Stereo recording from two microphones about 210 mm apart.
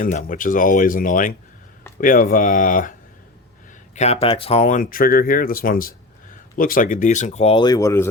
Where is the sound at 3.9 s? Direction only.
30° left (ahead or behind).